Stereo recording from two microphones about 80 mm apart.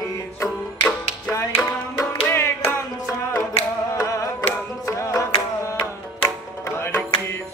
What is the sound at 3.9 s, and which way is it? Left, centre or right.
Music, left.